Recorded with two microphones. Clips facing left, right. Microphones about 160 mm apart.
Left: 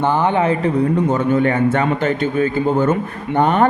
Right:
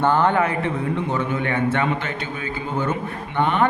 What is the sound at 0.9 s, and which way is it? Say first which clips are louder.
A man's voice: left 8 dB; 45° left (ahead or behind).